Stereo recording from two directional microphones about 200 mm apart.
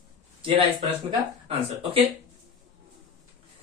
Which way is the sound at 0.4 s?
25° right (ahead or behind).